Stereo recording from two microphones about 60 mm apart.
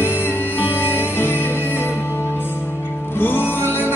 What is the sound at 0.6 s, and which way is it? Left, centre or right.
Music, left.